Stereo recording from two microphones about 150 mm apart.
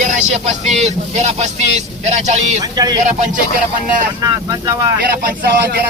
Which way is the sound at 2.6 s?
25° right (ahead or behind).